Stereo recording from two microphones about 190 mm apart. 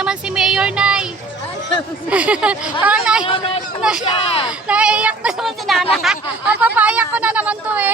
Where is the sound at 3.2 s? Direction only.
30° left (ahead or behind).